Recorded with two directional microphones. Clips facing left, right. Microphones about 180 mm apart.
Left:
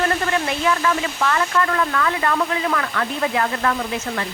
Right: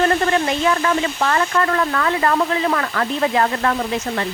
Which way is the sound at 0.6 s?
35° right (ahead or behind).